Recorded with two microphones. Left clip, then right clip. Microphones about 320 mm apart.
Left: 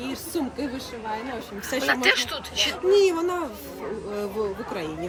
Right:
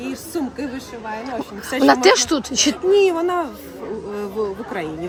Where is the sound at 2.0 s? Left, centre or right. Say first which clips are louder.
Right 7 dB; right.